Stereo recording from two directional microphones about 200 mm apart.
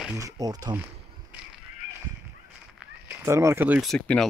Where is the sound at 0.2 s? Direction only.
20° right (ahead or behind).